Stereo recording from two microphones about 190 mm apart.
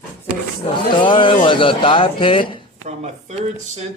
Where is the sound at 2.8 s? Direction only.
35° right (ahead or behind).